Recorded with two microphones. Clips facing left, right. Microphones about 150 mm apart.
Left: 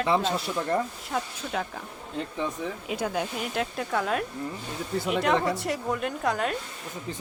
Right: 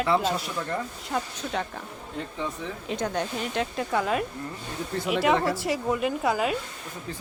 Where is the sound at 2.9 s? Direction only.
5° left (ahead or behind).